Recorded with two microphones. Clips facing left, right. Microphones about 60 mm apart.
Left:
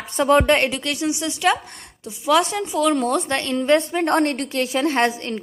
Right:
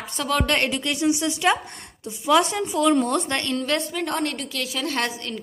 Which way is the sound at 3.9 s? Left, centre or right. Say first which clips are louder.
Left 7 dB; left.